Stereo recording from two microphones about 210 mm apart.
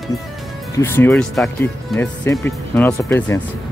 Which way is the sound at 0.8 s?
10° left (ahead or behind).